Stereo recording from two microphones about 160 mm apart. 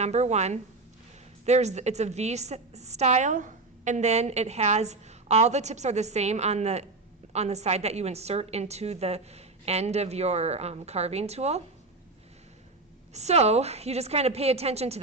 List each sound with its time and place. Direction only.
0.0 s a woman's voice: 45° right (ahead or behind)
13.1 s a woman's voice: 45° right (ahead or behind)